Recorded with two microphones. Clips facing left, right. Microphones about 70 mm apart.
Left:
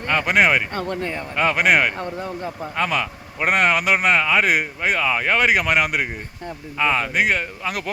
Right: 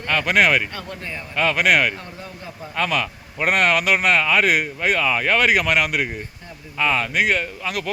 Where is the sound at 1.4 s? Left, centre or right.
Left.